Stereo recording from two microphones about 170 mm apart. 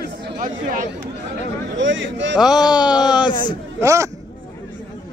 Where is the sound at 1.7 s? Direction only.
90° right.